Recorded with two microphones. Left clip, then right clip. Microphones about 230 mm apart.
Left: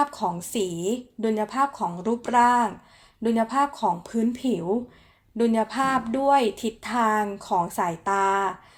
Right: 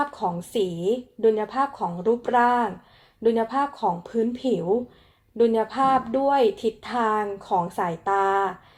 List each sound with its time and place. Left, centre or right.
0.0 s a woman's voice: left